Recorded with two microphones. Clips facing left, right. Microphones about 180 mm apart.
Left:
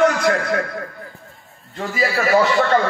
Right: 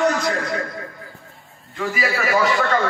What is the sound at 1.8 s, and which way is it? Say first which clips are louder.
Speech: left 2 dB; 40° left (ahead or behind).